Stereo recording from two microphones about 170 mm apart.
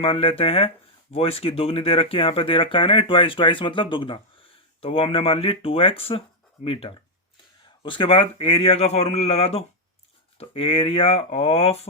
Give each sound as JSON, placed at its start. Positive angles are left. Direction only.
{"t": 0.0, "sound": "speech", "side_deg": 35}